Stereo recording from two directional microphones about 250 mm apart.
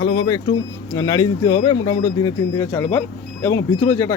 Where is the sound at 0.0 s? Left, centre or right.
Centre.